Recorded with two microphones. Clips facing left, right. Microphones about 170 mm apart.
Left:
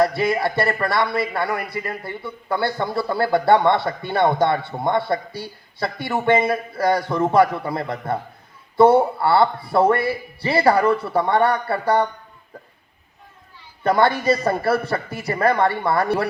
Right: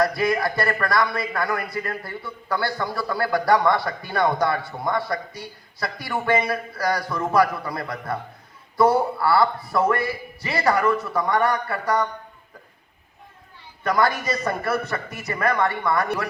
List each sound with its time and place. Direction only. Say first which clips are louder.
0.0 s a man's voice: left 2 dB; 25° left (ahead or behind)
13.8 s a man's voice: left 5 dB; 30° left (ahead or behind)